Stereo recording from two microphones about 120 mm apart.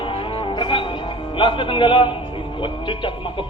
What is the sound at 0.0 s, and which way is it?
Music, 50° left (ahead or behind).